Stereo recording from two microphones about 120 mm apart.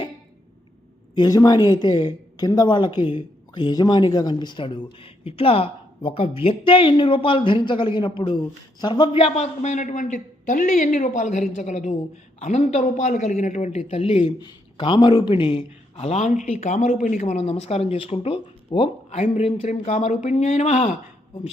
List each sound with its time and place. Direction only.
1.1 s a woman's voice: 30° left (ahead or behind); by 14.2 s 55° left (ahead or behind)
14.3 s a woman's voice: 40° left (ahead or behind)
19.1 s speech: 60° left (ahead or behind)